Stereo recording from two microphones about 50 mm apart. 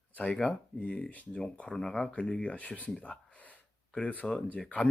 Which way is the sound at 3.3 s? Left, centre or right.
Left.